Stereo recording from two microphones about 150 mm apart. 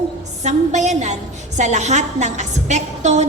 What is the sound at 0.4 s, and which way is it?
A woman's voice, 50° right (ahead or behind).